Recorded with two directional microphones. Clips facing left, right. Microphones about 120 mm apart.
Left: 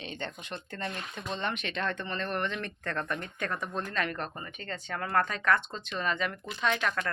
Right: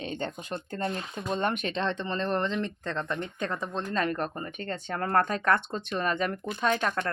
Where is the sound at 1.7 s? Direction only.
30° right (ahead or behind).